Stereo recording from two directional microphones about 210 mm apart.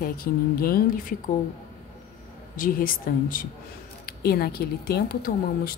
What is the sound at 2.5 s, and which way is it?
Speech, 40° left (ahead or behind).